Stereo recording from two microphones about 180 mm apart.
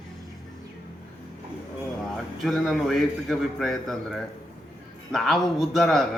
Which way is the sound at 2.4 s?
Centre (ahead or behind).